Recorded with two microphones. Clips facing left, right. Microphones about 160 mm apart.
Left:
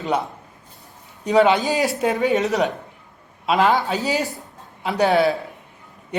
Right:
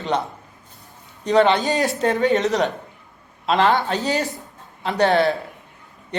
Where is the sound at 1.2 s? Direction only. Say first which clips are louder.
Even; 5° left (ahead or behind).